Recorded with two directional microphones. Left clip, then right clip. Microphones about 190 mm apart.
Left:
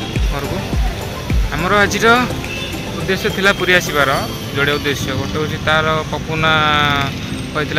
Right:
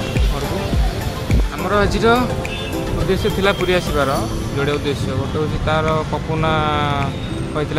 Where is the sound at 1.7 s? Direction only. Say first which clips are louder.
Left 3 dB; 5° left (ahead or behind).